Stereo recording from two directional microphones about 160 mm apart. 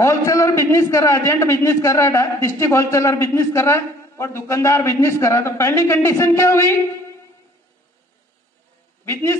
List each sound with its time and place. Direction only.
0.0 s a man's voice: 20° left (ahead or behind)
9.0 s a man's voice: 15° left (ahead or behind)